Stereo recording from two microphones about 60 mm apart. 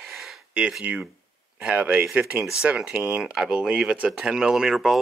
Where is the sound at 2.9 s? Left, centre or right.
Right.